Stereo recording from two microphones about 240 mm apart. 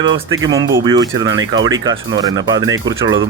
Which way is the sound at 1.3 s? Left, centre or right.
Right.